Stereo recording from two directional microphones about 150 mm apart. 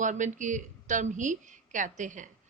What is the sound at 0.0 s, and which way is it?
A woman's voice, 55° right (ahead or behind).